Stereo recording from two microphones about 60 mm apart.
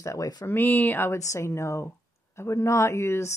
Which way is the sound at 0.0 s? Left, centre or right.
Left.